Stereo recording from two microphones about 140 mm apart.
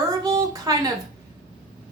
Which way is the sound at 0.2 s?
25° right (ahead or behind).